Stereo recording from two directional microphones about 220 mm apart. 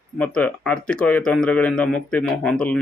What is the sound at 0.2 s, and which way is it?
Speech, 5° left (ahead or behind).